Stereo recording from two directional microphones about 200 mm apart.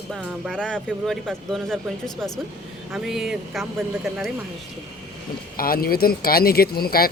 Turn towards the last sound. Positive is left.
turn(degrees=50)  # may be behind; listen again after turning